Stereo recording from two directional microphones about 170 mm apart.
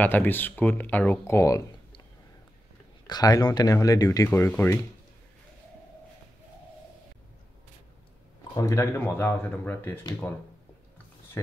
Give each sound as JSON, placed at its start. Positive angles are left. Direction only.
{"t": 0.0, "sound": "speech", "side_deg": 10}
{"t": 3.1, "sound": "speech", "side_deg": 20}
{"t": 8.5, "sound": "speech", "side_deg": 20}